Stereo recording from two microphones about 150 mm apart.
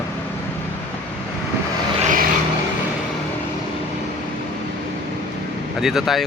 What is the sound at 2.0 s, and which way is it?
Vehicle, 65° right (ahead or behind).